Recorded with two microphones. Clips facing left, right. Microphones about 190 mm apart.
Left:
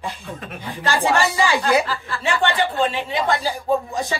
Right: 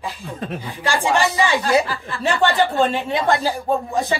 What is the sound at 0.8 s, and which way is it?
Speech, 10° right (ahead or behind).